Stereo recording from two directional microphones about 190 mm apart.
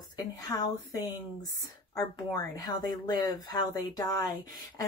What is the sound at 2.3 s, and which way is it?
Speech, 20° left (ahead or behind).